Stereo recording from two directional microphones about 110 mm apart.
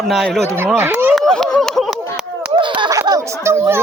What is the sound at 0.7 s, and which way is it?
Speech, 20° right (ahead or behind).